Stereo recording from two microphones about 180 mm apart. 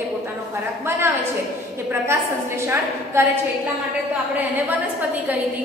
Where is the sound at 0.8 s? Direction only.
15° right (ahead or behind).